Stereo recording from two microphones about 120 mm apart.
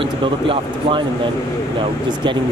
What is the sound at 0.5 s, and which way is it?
Speech, 45° right (ahead or behind).